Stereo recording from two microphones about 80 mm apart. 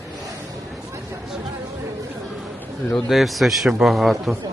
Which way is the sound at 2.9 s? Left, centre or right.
Centre.